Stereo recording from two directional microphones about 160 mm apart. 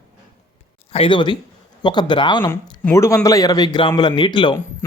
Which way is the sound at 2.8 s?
15° left (ahead or behind).